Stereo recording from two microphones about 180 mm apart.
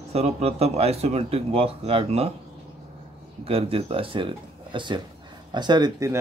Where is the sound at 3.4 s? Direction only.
30° right (ahead or behind).